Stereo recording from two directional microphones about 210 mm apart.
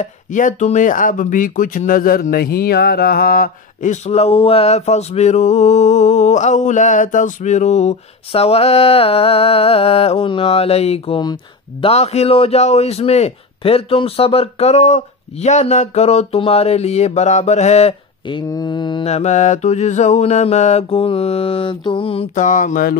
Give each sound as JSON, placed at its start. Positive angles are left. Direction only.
{"t": 0.0, "sound": "speech", "side_deg": 35}
{"t": 18.5, "sound": "speech", "side_deg": 20}